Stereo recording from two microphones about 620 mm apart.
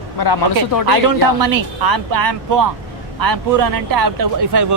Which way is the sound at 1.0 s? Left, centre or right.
Right.